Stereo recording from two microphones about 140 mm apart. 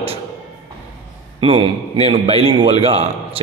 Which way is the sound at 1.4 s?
35° right (ahead or behind).